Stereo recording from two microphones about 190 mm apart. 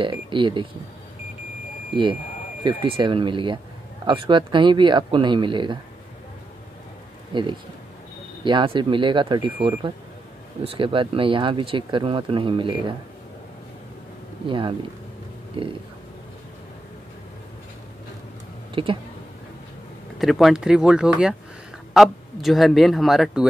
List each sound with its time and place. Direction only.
0.0 s speech: 25° right (ahead or behind)
2.6 s speech: 25° right (ahead or behind)
7.3 s speech: 25° right (ahead or behind)
14.4 s speech: 25° right (ahead or behind)
18.8 s speech: 30° right (ahead or behind)
20.2 s speech: centre (ahead or behind)